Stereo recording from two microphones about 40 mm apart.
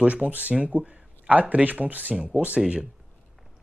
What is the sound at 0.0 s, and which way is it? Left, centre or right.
Speech, right.